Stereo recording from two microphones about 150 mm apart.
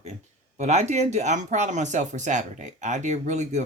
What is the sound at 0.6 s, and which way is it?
Speech, 45° right (ahead or behind).